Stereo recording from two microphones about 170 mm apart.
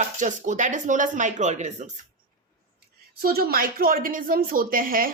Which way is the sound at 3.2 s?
60° right (ahead or behind).